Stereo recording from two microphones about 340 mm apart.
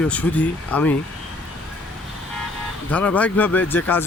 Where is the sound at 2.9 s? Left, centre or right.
Centre.